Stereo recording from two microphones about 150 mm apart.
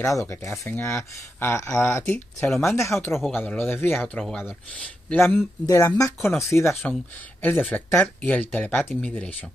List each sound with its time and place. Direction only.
0.0 s speech: 20° left (ahead or behind)
6.7 s speech: centre (ahead or behind)